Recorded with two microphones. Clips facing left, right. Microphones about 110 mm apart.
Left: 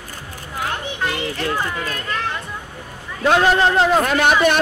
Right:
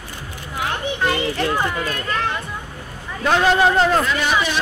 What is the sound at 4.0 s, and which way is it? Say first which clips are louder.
Speech: left 4 dB; 55° left (ahead or behind).